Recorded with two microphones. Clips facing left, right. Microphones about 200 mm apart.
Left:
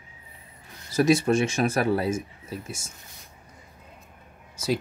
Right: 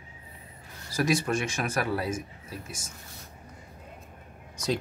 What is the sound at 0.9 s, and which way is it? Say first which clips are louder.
Speech: left 6 dB; 25° left (ahead or behind).